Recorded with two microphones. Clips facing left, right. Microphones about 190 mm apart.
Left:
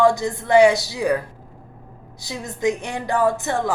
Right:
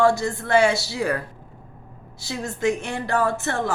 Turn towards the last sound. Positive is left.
turn(degrees=15)  # may be behind; listen again after turning